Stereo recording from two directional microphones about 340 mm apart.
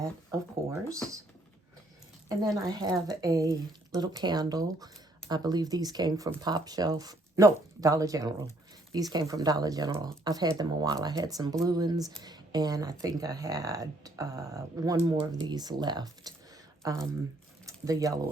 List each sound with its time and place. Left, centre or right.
2.3 s speech: centre